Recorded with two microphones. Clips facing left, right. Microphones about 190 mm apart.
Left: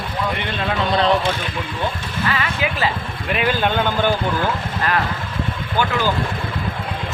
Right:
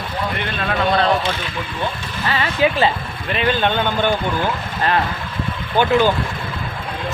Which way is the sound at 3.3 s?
5° left (ahead or behind).